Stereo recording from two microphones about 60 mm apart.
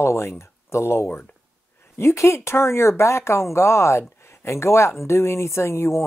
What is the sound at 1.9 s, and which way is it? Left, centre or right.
Speech, left.